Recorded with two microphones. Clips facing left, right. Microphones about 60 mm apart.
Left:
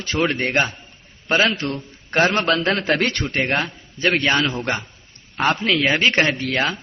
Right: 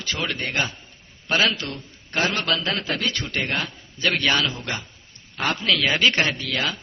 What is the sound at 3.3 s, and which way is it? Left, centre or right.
A man's voice, left.